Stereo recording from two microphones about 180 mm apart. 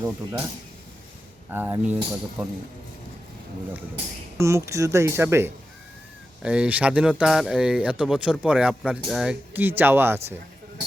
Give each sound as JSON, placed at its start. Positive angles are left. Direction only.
{"t": 0.0, "sound": "speech", "side_deg": -15}
{"t": 1.5, "sound": "speech", "side_deg": -10}
{"t": 4.4, "sound": "speech", "side_deg": -15}